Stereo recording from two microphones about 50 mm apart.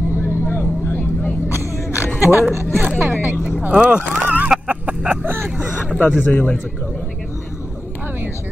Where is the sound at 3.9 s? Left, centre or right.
Right.